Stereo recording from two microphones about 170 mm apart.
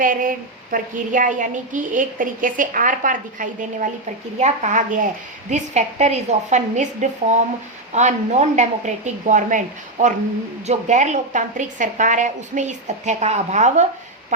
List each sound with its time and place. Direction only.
0.0 s a woman's voice: 55° right (ahead or behind)
10.7 s a woman's voice: 45° right (ahead or behind)